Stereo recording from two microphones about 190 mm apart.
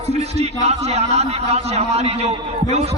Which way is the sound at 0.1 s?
35° right (ahead or behind).